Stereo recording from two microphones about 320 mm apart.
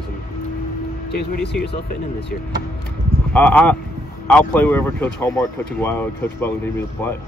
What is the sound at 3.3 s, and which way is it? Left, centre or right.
Speech, centre.